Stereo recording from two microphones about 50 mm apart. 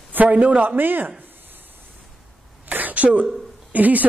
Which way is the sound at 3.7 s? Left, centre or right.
Right.